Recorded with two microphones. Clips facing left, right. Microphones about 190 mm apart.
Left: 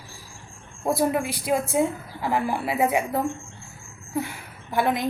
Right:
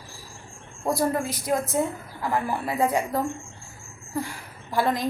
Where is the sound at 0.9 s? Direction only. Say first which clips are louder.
Left 2 dB; 15° left (ahead or behind).